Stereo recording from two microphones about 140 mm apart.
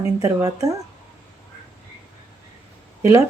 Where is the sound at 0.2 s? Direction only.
25° right (ahead or behind).